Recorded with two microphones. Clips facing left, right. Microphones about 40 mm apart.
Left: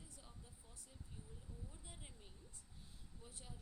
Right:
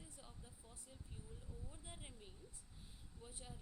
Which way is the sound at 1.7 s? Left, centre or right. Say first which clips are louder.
Right 2 dB; centre.